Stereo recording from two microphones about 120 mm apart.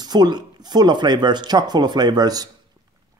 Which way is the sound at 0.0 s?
35° right (ahead or behind).